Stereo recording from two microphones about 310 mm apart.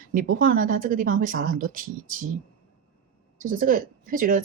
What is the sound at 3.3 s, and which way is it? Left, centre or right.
Speech, right.